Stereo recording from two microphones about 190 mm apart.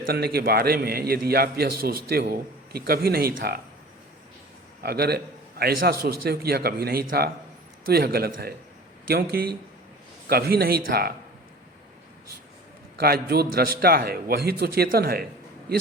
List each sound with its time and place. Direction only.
0.0 s a man's voice: 55° right (ahead or behind)
4.8 s a man's voice: 55° right (ahead or behind)
13.0 s a man's voice: 55° right (ahead or behind)